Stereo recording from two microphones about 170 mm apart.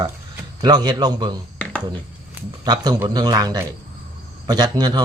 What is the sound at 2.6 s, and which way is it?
Speech, 25° right (ahead or behind).